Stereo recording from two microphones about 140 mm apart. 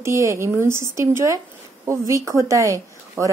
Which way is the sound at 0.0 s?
20° right (ahead or behind).